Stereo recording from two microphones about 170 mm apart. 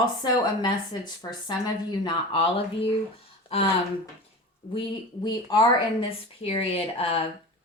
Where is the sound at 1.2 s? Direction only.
20° left (ahead or behind).